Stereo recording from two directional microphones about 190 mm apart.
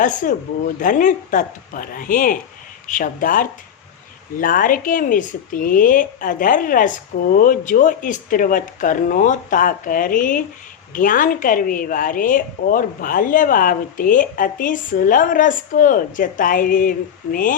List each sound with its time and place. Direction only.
0.0 s a woman's voice: 45° left (ahead or behind)